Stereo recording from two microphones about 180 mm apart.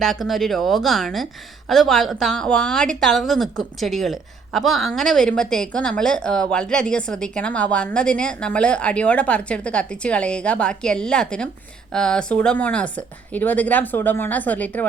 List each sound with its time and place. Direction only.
0.0 s a woman's voice: centre (ahead or behind)